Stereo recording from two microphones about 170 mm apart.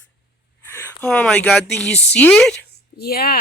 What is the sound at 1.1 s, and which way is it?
Speech, 5° left (ahead or behind).